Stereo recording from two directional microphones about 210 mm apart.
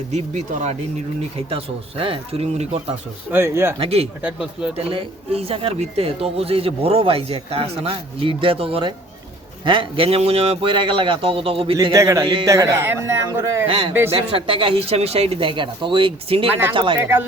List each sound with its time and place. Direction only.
0.1 s speech: 30° right (ahead or behind)
3.3 s a man's voice: 10° right (ahead or behind)
3.8 s speech: 30° right (ahead or behind)
4.2 s speech: 5° right (ahead or behind)
4.9 s a man's voice: 25° right (ahead or behind)
13.7 s speech: 25° right (ahead or behind)
16.5 s a man's voice: 10° right (ahead or behind)
16.7 s speech: 25° right (ahead or behind)
17.0 s a man's voice: 10° right (ahead or behind)